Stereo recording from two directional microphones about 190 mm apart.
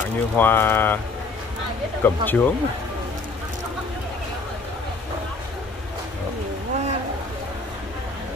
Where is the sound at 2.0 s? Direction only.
10° left (ahead or behind).